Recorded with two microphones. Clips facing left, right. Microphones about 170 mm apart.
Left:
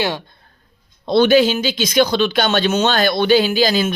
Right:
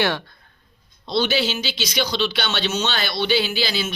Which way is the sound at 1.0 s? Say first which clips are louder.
Left 9 dB; 55° left (ahead or behind).